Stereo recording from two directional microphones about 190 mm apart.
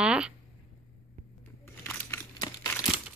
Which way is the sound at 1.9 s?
15° left (ahead or behind).